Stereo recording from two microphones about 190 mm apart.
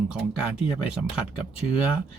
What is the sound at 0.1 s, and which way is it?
Speech, 5° right (ahead or behind).